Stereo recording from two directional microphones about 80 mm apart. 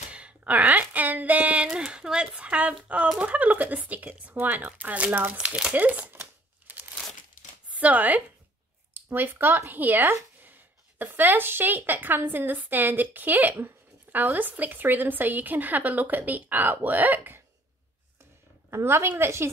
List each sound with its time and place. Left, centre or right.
0.1 s a sound: centre
3.2 s a woman's voice: centre
6.7 s crumpling: centre
7.7 s a woman's voice: centre
18.7 s a woman's voice: right